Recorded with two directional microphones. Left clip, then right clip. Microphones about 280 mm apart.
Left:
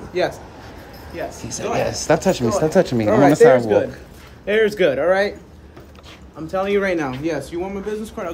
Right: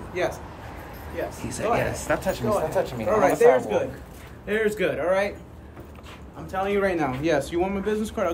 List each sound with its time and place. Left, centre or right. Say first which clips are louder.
0.2 s speech: left 6 dB; left
1.4 s speech: left 3 dB; centre
2.1 s speech: left 4 dB; left
6.4 s speech: left 5 dB; left
7.1 s speech: even; centre